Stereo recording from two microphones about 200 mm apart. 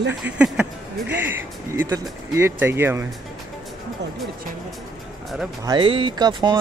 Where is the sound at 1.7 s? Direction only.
15° right (ahead or behind).